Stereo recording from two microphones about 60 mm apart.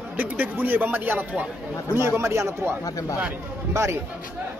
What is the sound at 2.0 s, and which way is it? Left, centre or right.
Speech, right.